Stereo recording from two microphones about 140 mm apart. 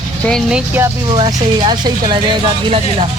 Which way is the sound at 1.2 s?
35° right (ahead or behind).